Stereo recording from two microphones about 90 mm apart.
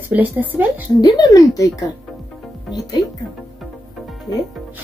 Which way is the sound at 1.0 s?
50° left (ahead or behind).